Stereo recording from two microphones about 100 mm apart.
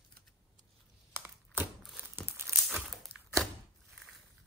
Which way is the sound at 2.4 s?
5° left (ahead or behind).